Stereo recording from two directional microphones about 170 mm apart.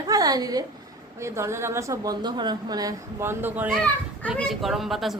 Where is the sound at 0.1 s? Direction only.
20° right (ahead or behind).